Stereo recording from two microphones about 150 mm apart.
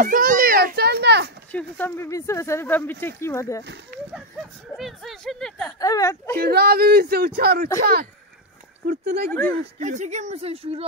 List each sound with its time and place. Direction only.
0.0 s children playing: 65° right (ahead or behind); by 1.3 s 90° right
1.5 s speech: 10° left (ahead or behind)
3.9 s speech: 70° right (ahead or behind)
4.7 s speech: centre (ahead or behind)
5.7 s speech: 25° left (ahead or behind)
6.4 s speech: 90° right
9.8 s speech: 50° right (ahead or behind)